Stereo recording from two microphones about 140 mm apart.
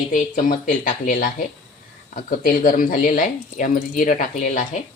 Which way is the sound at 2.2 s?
80° left.